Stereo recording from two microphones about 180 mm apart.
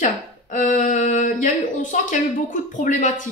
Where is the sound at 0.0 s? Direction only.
45° left (ahead or behind).